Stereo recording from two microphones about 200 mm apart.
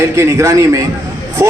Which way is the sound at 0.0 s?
15° right (ahead or behind).